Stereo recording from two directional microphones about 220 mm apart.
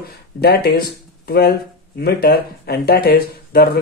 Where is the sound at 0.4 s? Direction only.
45° left (ahead or behind).